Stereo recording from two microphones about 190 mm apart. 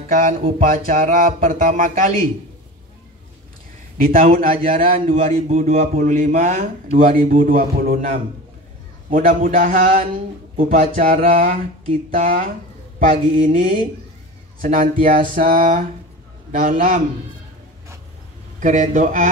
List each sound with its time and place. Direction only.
0.3 s speech: 30° right (ahead or behind)
0.6 s a man's voice: 45° right (ahead or behind)
4.0 s a man's voice: 45° right (ahead or behind)
18.6 s speech: 40° right (ahead or behind)